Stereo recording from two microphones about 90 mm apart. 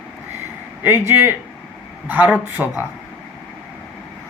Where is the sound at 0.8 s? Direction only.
25° right (ahead or behind).